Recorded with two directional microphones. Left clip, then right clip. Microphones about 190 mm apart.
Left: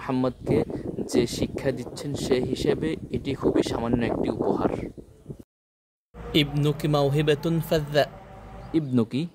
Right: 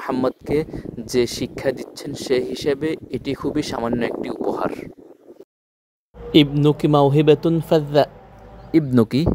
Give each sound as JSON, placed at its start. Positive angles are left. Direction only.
{"t": 0.0, "sound": "speech", "side_deg": -40}
{"t": 6.3, "sound": "speech", "side_deg": -35}